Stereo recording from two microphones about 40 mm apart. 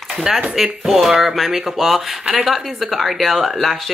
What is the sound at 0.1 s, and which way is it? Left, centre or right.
Speech, centre.